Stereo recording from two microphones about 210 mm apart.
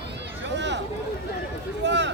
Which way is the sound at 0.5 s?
55° right (ahead or behind).